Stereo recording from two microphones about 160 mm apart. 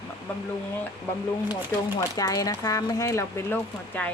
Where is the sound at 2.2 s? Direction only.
20° left (ahead or behind).